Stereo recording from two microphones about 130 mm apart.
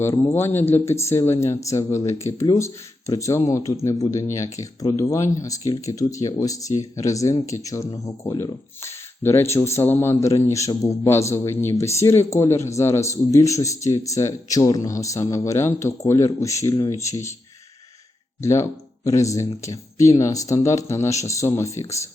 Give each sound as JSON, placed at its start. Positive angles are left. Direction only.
{"t": 0.1, "sound": "speech", "side_deg": 20}
{"t": 18.4, "sound": "speech", "side_deg": 20}